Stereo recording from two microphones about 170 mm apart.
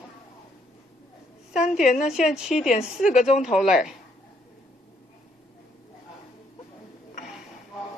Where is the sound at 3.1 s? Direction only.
45° left (ahead or behind).